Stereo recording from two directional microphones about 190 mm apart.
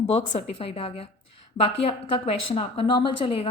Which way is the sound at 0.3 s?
30° left (ahead or behind).